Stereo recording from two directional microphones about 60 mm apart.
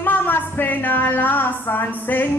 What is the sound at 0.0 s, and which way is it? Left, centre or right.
A woman's voice, left.